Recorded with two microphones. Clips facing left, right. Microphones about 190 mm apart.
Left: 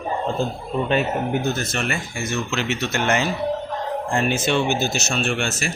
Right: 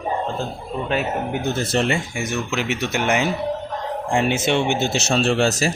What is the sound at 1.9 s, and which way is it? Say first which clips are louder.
Speech: right 1 dB; 15° right (ahead or behind).